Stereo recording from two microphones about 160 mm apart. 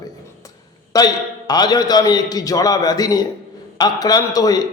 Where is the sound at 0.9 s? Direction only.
25° left (ahead or behind).